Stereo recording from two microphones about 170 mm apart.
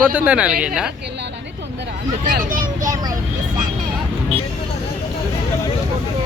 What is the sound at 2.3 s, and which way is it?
Vehicle, 55° right (ahead or behind).